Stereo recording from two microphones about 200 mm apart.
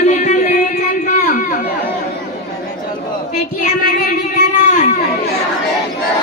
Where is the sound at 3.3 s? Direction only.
40° left (ahead or behind).